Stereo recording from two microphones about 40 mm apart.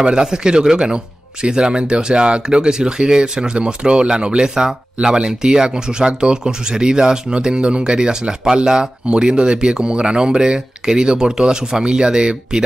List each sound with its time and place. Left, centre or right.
0.0 s speech: centre